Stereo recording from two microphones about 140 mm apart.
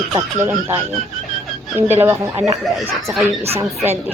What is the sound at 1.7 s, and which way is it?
Speech, 15° right (ahead or behind).